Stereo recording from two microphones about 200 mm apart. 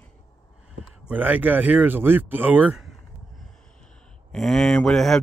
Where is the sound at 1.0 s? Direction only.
10° right (ahead or behind).